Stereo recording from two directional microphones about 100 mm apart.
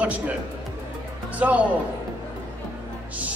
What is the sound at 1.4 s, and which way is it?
Speech, 15° right (ahead or behind).